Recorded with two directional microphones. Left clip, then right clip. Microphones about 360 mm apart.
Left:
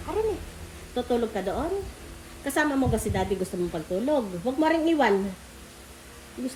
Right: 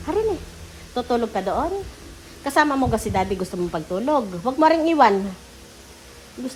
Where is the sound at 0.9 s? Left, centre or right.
Centre.